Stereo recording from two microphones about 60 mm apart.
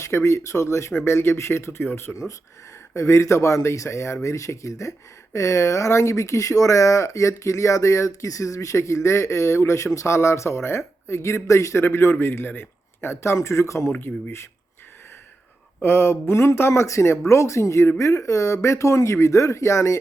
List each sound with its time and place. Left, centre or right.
0.0 s speech: left
2.1 s speech: left
2.9 s speech: left
11.9 s speech: left
14.0 s speech: left
15.8 s speech: left